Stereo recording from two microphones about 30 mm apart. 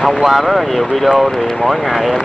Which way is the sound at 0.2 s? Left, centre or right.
Centre.